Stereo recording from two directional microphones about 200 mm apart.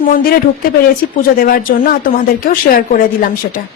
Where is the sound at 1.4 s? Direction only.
45° left (ahead or behind).